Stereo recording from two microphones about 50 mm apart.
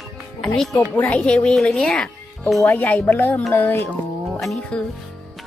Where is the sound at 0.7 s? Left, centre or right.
Left.